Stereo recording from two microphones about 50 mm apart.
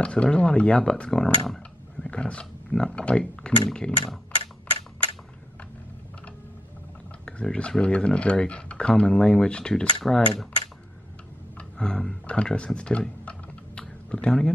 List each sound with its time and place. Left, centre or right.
0.0 s speech: left
2.0 s a sound: left
2.7 s speech: centre
3.6 s a sound: centre
7.2 s speech: centre
11.5 s speech: centre
13.2 s typing: left